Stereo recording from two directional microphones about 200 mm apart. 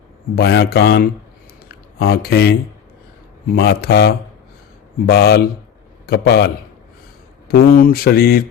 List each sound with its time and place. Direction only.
0.3 s speech: 50° left (ahead or behind)